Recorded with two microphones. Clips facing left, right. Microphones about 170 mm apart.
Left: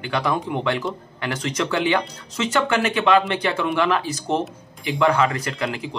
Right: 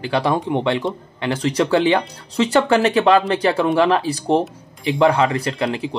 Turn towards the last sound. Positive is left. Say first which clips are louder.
# right 5 dB
turn(degrees=-30)  # may be behind; listen again after turning